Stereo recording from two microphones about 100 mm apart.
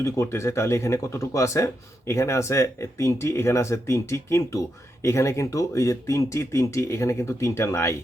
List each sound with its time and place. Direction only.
0.0 s speech: 30° left (ahead or behind)